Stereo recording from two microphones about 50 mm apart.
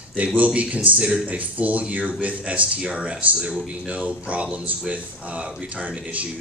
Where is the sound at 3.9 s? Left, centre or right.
Right.